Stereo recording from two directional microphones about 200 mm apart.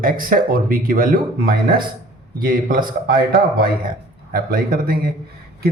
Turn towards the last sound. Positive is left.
turn(degrees=-45)  # may be behind; listen again after turning